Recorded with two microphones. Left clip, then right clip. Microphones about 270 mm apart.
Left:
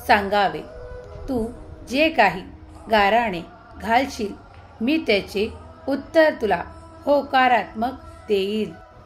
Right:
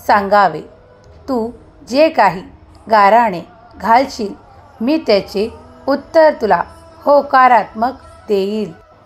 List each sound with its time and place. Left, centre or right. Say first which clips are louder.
0.0 s a woman's voice: right 7 dB; centre
1.9 s a woman's voice: right 7 dB; centre